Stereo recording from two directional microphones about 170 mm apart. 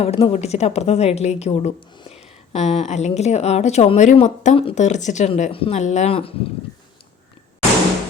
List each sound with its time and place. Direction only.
0.0 s a woman's voice: 35° left (ahead or behind)